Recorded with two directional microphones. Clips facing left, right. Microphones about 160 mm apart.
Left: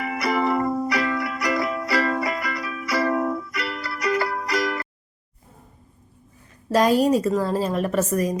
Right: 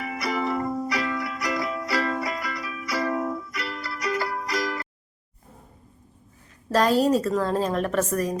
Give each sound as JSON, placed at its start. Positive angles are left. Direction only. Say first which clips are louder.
{"t": 0.0, "sound": "music", "louder": "left 4 dB", "side_deg": 70}
{"t": 6.7, "sound": "a woman's voice", "louder": "left 2 dB", "side_deg": 10}